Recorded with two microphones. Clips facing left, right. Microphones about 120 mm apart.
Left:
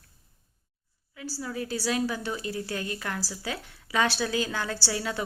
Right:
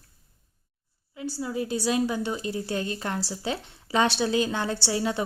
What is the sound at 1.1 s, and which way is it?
A woman's voice, 20° right (ahead or behind).